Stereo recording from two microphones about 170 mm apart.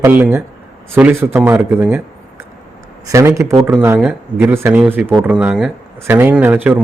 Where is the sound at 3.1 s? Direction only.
20° right (ahead or behind).